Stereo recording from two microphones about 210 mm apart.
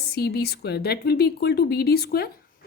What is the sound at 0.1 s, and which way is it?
Speech, 50° left (ahead or behind).